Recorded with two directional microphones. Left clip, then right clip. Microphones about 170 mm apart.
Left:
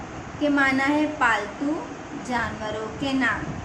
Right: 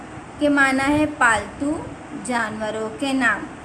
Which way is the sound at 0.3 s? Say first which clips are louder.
Right 4 dB; 45° right (ahead or behind).